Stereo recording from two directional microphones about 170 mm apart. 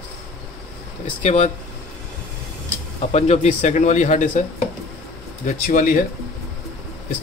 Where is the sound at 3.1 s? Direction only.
40° left (ahead or behind).